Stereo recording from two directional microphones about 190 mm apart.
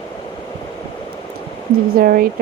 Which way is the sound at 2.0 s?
50° right (ahead or behind).